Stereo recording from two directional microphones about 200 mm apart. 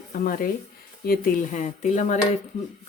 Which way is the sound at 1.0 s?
45° left (ahead or behind).